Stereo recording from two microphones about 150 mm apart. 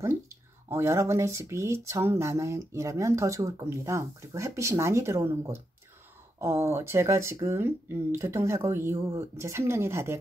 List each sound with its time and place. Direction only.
0.7 s speech: 20° right (ahead or behind)